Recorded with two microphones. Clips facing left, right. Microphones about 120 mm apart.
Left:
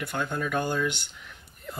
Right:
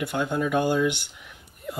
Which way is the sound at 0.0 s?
15° right (ahead or behind).